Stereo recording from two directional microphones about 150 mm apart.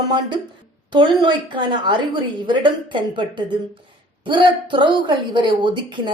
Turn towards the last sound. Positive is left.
turn(degrees=-30)  # may be behind; listen again after turning